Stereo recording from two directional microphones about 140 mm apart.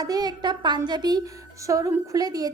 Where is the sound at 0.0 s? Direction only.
30° right (ahead or behind).